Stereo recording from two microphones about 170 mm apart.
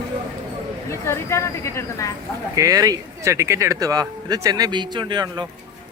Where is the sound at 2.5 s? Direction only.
20° right (ahead or behind).